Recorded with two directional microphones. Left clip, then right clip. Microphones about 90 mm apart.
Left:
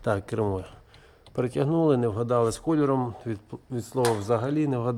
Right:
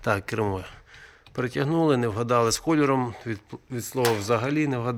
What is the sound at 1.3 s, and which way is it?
Speech, 35° left (ahead or behind).